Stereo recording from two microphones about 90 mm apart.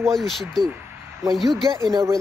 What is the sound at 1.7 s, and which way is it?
Speech, 40° right (ahead or behind).